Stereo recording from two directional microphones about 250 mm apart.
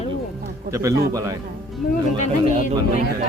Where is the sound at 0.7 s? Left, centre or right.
Centre.